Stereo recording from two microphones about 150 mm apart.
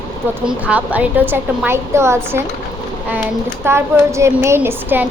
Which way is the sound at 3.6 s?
20° right (ahead or behind).